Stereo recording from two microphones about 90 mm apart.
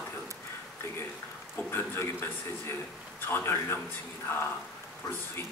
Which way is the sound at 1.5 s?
25° left (ahead or behind).